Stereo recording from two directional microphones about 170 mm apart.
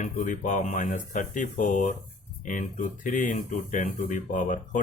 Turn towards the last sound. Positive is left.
turn(degrees=50)  # may be behind; listen again after turning